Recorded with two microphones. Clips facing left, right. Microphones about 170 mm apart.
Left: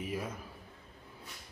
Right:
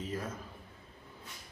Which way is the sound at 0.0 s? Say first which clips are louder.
Left 1 dB; 10° left (ahead or behind).